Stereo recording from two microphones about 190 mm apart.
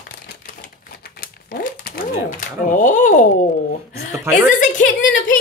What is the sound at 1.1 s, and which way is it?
Speech, 50° left (ahead or behind).